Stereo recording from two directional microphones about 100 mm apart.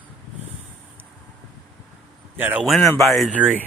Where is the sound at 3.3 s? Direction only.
15° right (ahead or behind).